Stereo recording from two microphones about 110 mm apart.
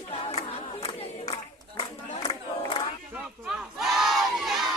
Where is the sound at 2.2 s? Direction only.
70° left (ahead or behind).